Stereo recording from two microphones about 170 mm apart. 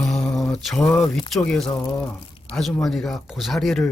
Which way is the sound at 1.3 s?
Centre (ahead or behind).